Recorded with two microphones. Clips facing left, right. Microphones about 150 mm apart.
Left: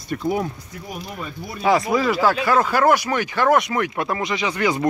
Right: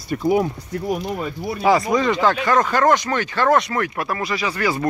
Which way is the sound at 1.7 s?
Centre (ahead or behind).